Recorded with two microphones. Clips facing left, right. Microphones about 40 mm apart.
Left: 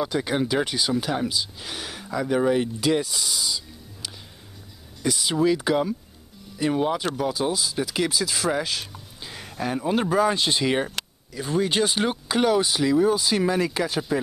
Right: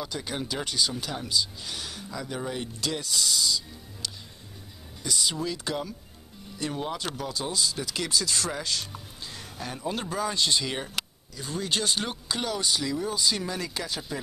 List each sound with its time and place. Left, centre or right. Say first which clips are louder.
0.0 s speech: left 9 dB; left